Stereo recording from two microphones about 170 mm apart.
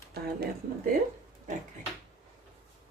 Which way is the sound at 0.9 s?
55° right (ahead or behind).